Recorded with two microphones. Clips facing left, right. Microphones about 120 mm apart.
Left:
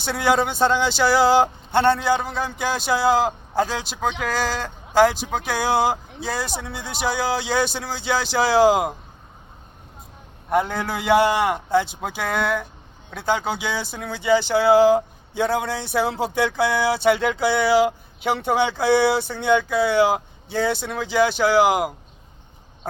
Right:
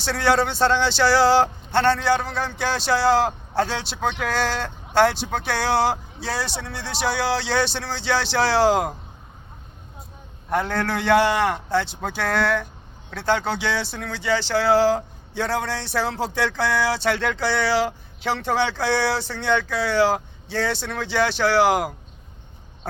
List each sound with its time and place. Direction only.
0.0 s speech: 15° left (ahead or behind)
6.2 s speech: centre (ahead or behind)
10.7 s speech: 5° left (ahead or behind)
15.5 s speech: 5° left (ahead or behind)
16.0 s speech: 20° left (ahead or behind)
16.9 s speech: 5° left (ahead or behind)
21.0 s speech: 5° left (ahead or behind)